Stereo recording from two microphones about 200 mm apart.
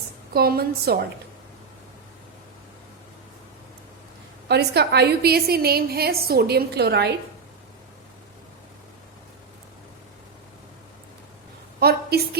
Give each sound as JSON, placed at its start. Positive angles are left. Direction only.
{"t": 0.3, "sound": "a woman's voice", "side_deg": -50}
{"t": 4.4, "sound": "a woman's voice", "side_deg": -55}
{"t": 11.8, "sound": "a sound", "side_deg": -50}